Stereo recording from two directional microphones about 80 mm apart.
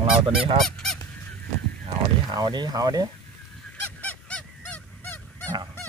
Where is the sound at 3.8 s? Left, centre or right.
Left.